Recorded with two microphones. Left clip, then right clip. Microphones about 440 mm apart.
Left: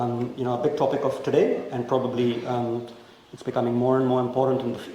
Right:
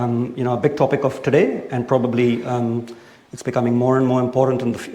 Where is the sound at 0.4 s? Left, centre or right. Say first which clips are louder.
Right 5 dB; right.